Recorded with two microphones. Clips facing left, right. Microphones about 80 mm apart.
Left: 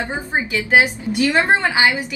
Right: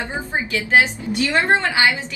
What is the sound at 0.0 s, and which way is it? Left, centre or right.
A woman's voice, centre.